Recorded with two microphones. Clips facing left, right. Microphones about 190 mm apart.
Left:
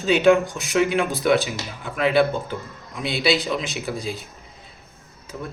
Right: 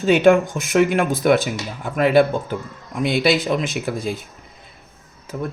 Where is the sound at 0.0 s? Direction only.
50° right (ahead or behind).